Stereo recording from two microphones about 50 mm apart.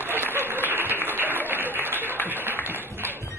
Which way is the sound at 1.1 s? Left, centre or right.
Right.